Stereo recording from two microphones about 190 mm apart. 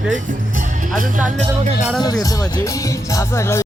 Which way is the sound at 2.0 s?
20° left (ahead or behind).